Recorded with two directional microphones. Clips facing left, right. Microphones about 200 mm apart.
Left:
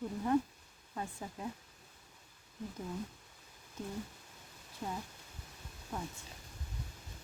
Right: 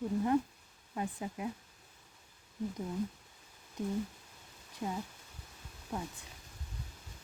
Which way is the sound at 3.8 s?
15° right (ahead or behind).